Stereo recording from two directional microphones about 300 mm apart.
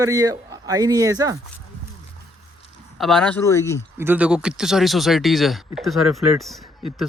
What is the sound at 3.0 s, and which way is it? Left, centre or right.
Speech, centre.